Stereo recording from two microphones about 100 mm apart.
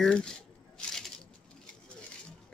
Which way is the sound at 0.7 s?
5° left (ahead or behind).